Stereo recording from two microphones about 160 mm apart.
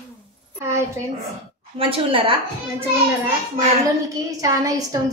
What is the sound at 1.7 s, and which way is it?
Speech, 35° right (ahead or behind).